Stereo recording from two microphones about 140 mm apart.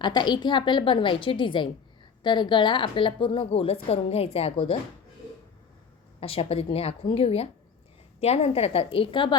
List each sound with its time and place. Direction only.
0.0 s a woman's voice: 30° left (ahead or behind)
6.1 s a woman's voice: 45° left (ahead or behind)